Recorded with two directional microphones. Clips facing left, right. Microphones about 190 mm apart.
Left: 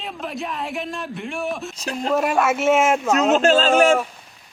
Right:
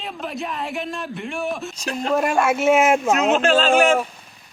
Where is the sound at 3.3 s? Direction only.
40° left (ahead or behind).